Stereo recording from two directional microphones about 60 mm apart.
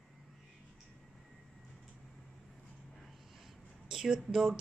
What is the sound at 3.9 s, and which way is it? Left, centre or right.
Speech, centre.